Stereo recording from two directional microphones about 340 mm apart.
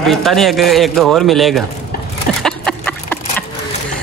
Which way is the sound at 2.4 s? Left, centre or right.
Centre.